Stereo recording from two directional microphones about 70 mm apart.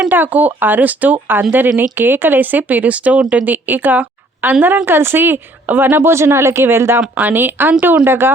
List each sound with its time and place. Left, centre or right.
0.1 s a woman's voice: right